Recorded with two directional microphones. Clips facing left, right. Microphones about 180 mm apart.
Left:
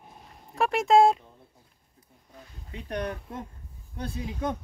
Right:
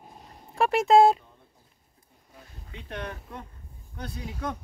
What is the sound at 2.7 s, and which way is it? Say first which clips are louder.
Speech: left 5 dB; 40° left (ahead or behind).